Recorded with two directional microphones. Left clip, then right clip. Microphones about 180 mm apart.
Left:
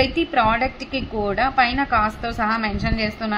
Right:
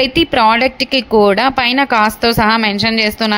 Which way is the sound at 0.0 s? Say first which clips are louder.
Right 7 dB; 35° right (ahead or behind).